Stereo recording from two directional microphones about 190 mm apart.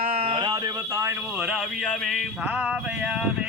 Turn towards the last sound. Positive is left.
turn(degrees=-5)  # may be behind; listen again after turning